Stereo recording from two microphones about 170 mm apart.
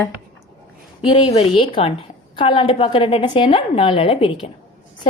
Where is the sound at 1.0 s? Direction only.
35° left (ahead or behind).